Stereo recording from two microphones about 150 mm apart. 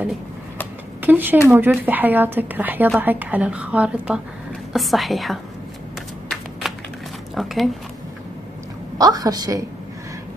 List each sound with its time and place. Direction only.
1.0 s a woman's voice: 15° right (ahead or behind)
6.6 s a sound: centre (ahead or behind)
7.3 s a woman's voice: centre (ahead or behind)
8.9 s a woman's voice: 25° right (ahead or behind)